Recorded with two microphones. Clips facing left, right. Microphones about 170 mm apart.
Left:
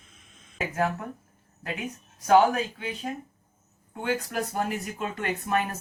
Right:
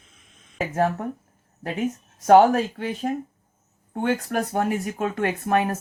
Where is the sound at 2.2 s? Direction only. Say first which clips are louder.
Right 5 dB; 50° right (ahead or behind).